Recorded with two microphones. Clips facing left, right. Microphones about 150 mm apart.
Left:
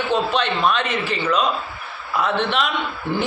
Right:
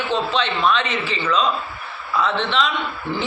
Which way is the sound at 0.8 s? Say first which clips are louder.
Left 1 dB; 50° left (ahead or behind).